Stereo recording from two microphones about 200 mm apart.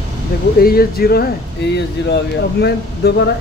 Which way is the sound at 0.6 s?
50° left (ahead or behind).